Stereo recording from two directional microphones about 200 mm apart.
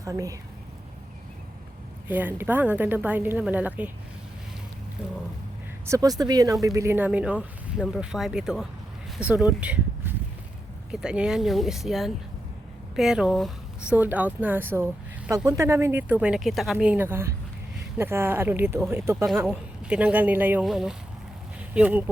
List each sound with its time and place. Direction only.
0.0 s speech: 15° right (ahead or behind)
2.0 s speech: 10° right (ahead or behind)
5.8 s speech: 15° right (ahead or behind)
19.1 s speech: centre (ahead or behind)